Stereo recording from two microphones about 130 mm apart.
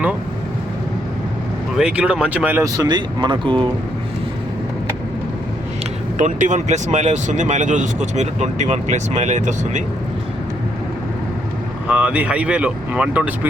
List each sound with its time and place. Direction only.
1.7 s speech: 5° right (ahead or behind)
2.6 s speech: 30° right (ahead or behind)
6.1 s speech: 70° right (ahead or behind)
11.9 s speech: 10° right (ahead or behind)